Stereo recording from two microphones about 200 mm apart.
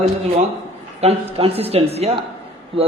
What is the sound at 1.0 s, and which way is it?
A man's voice, 30° right (ahead or behind).